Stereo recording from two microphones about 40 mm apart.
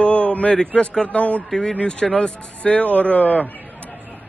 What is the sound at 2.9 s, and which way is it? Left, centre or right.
Speech, left.